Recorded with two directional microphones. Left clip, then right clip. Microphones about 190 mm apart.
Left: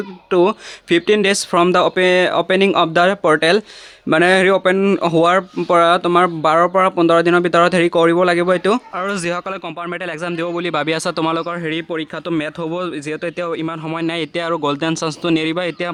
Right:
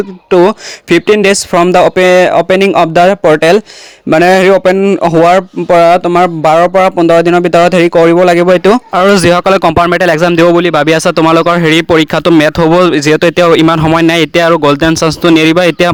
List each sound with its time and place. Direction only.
0.3 s a man's voice: 30° right (ahead or behind)